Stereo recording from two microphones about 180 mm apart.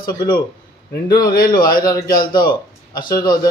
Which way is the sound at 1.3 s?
55° left (ahead or behind).